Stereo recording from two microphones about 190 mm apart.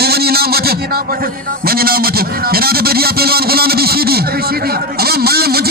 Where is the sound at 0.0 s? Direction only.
55° right (ahead or behind).